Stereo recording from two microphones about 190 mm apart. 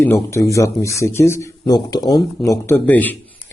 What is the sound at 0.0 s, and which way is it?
A man's voice, 15° left (ahead or behind).